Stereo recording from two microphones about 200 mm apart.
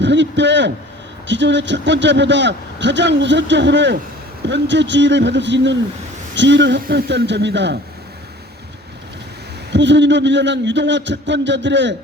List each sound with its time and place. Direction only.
0.0 s a man's voice: 65° right (ahead or behind)
9.7 s a man's voice: 65° right (ahead or behind)